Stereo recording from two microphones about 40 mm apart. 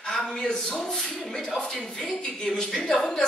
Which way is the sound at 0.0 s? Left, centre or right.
Centre.